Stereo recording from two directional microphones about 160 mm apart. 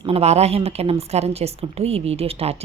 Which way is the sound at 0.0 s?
40° right (ahead or behind).